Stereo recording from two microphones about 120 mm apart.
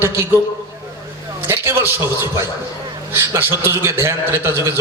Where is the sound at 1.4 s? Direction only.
20° right (ahead or behind).